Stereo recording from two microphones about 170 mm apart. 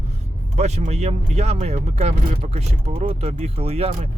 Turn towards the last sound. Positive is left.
turn(degrees=-40)  # may be behind; listen again after turning